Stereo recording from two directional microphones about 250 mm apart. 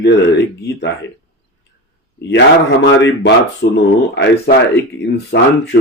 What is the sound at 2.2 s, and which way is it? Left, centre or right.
Speech, left.